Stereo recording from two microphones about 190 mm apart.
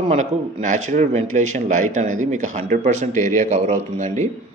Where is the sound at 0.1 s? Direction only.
40° right (ahead or behind).